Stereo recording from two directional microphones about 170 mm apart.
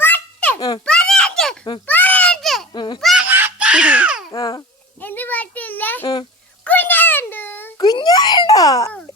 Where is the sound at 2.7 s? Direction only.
25° left (ahead or behind).